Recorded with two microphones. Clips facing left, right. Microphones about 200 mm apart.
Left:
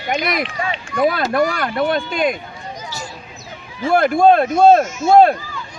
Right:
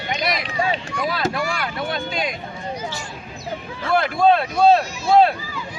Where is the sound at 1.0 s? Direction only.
55° left (ahead or behind).